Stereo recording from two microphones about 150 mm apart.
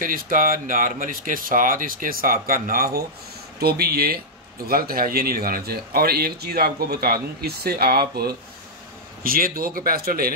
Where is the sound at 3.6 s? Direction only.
90° right.